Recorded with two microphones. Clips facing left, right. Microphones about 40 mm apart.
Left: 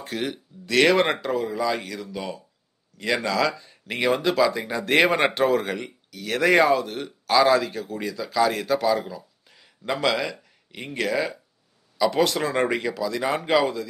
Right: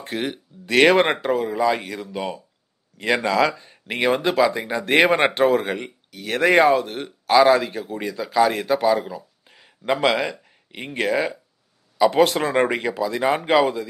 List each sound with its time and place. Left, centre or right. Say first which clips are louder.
0.0 s speech: right 2 dB; right